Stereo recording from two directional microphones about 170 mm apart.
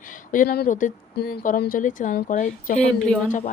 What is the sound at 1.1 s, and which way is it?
Speech, 65° left (ahead or behind).